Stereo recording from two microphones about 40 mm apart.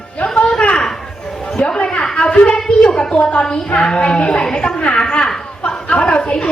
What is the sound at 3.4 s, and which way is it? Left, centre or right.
A woman's voice, centre.